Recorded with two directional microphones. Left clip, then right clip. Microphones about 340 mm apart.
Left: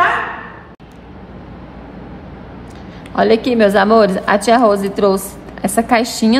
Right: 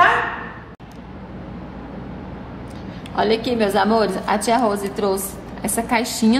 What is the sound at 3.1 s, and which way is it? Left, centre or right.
A woman's voice, left.